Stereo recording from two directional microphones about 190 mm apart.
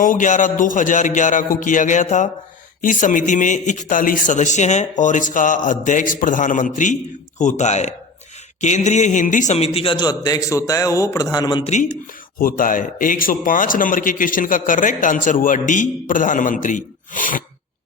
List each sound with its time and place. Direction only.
0.0 s a man's voice: 40° left (ahead or behind); by 11.7 s 25° left (ahead or behind)
12.4 s a man's voice: 45° left (ahead or behind)